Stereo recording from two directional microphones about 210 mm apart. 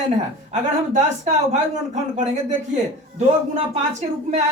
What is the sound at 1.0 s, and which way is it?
A woman's voice, 35° right (ahead or behind).